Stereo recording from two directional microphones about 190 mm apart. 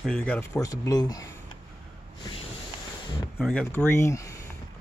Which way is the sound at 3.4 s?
5° left (ahead or behind).